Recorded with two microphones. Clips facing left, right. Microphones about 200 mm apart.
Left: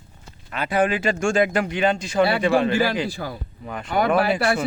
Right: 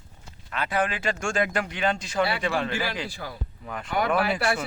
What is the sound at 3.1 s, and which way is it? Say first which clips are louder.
Speech: left 6 dB; 35° left (ahead or behind).